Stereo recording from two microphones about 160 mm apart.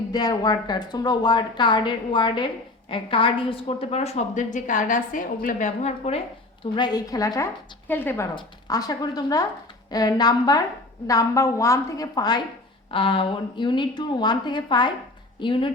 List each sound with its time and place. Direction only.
0.1 s a woman's voice: 25° left (ahead or behind); by 6.2 s 40° left (ahead or behind)
6.7 s a woman's voice: 25° left (ahead or behind)